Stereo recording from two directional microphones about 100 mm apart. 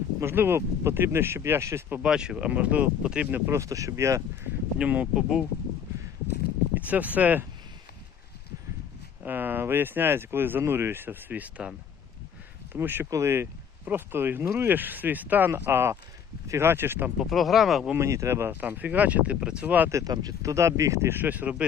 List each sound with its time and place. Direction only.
0.2 s speech: 25° right (ahead or behind)
2.0 s speech: 10° right (ahead or behind)
3.6 s speech: 35° right (ahead or behind)
4.8 s speech: 10° right (ahead or behind)
6.7 s speech: 15° right (ahead or behind)
9.2 s speech: 20° right (ahead or behind)
12.7 s speech: 20° right (ahead or behind)
17.2 s speech: centre (ahead or behind)
17.9 s speech: 30° right (ahead or behind)
19.9 s speech: 35° right (ahead or behind); by 21.5 s 15° right (ahead or behind)